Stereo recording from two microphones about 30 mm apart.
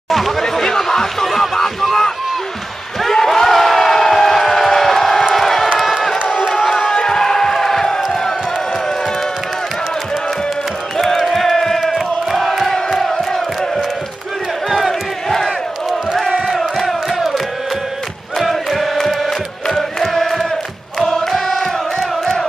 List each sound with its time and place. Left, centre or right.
0.4 s a sound: centre
3.0 s crowd: centre
6.5 s crowd: centre
11.0 s crowd: centre
14.9 s crowd: centre
16.5 s a sound: centre
18.4 s chant: centre
19.7 s music: centre
21.3 s chant: centre